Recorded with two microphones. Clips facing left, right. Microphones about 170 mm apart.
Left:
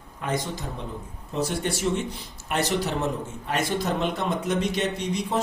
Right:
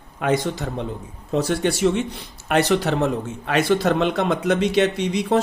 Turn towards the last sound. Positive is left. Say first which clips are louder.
# right 6 dB
turn(degrees=-75)  # may be behind; listen again after turning